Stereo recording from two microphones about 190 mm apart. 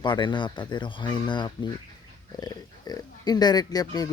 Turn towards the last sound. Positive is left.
turn(degrees=20)  # may be behind; listen again after turning